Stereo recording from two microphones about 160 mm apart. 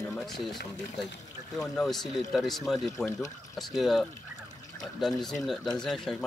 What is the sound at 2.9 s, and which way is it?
Speech, 20° left (ahead or behind).